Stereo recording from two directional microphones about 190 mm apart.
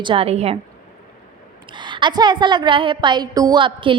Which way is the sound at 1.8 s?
25° right (ahead or behind).